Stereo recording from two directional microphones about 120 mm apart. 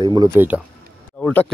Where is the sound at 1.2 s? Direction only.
10° left (ahead or behind).